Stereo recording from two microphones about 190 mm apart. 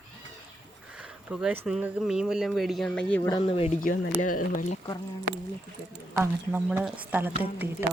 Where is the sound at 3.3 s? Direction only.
25° left (ahead or behind).